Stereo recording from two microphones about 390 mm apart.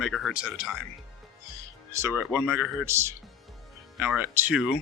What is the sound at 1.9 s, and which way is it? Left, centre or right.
Speech, centre.